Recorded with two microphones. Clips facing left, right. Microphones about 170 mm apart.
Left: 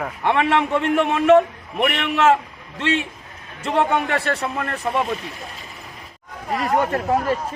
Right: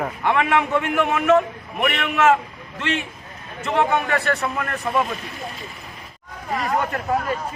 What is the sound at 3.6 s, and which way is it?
A man's voice, 30° left (ahead or behind).